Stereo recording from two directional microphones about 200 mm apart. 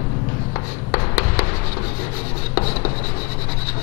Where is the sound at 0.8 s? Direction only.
15° left (ahead or behind).